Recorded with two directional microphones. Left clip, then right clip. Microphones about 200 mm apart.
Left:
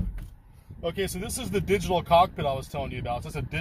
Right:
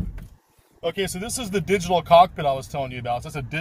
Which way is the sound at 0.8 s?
5° right (ahead or behind).